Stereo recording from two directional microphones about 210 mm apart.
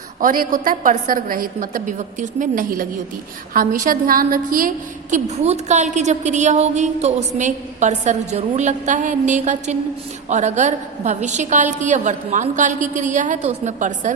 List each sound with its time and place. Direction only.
0.2 s a woman's voice: 40° right (ahead or behind)